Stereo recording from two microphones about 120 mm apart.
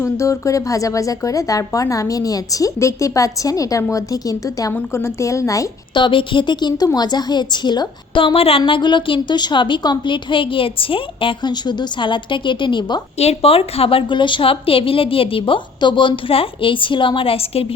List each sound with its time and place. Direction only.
0.0 s speech: 25° left (ahead or behind)
4.7 s speech: 20° left (ahead or behind)
5.9 s a woman's voice: 40° left (ahead or behind)
13.1 s a woman's voice: 55° left (ahead or behind)